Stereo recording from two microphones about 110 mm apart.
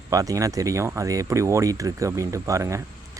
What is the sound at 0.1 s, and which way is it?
Speech, 30° right (ahead or behind).